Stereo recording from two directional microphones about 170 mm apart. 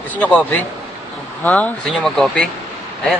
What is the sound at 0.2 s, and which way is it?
Speech, 10° left (ahead or behind).